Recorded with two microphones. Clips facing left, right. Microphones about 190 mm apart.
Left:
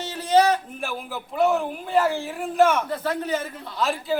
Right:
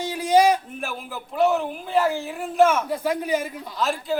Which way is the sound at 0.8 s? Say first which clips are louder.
Left 1 dB; centre (ahead or behind).